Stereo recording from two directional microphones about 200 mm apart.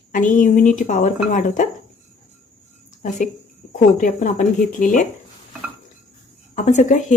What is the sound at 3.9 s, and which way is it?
Speech, 40° left (ahead or behind).